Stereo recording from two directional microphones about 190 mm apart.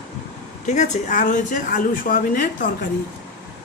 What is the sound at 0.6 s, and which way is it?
Speech, 40° left (ahead or behind).